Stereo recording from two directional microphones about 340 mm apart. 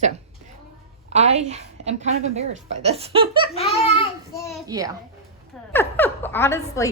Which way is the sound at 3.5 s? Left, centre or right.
Centre.